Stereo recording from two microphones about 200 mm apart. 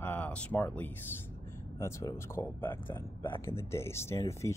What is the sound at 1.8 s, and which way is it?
Speech, 15° left (ahead or behind).